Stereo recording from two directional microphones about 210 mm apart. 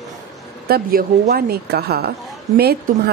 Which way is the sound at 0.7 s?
45° right (ahead or behind).